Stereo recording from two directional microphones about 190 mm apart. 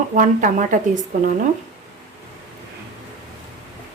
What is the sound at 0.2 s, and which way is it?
Speech, 45° right (ahead or behind).